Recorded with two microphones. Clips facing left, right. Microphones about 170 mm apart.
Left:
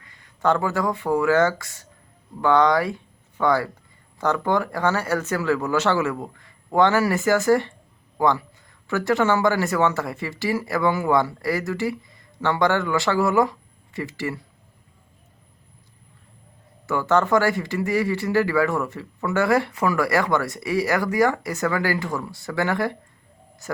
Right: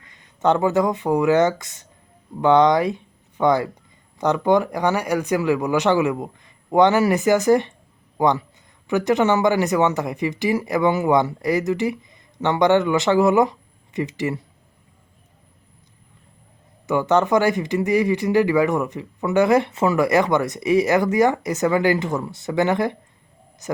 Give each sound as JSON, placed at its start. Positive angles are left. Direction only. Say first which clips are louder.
{"t": 0.1, "sound": "speech", "louder": "right 2 dB", "side_deg": -20}
{"t": 16.8, "sound": "speech", "louder": "right 2 dB", "side_deg": -20}